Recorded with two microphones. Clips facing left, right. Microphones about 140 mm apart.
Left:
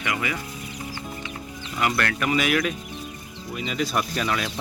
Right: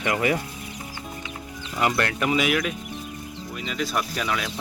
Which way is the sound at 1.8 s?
25° right (ahead or behind).